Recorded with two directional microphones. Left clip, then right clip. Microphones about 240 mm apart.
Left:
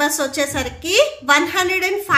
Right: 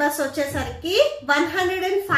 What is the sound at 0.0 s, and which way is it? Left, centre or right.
A woman's voice, left.